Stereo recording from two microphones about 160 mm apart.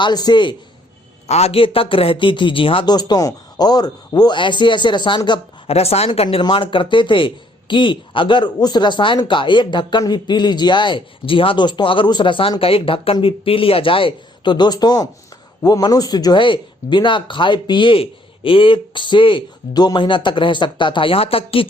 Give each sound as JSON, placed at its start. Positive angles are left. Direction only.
{"t": 0.0, "sound": "a man's voice", "side_deg": 25}
{"t": 1.3, "sound": "a man's voice", "side_deg": 40}